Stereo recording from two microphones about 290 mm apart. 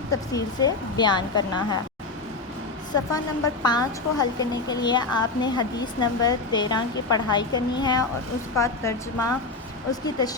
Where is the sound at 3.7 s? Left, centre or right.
Centre.